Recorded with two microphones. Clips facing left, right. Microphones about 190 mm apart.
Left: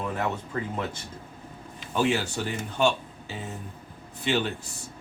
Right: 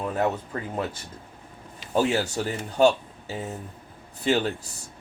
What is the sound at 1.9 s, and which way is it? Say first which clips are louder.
Speech: right 2 dB; 40° right (ahead or behind).